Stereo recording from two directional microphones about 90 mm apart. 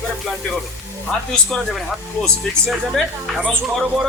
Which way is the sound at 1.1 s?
10° left (ahead or behind).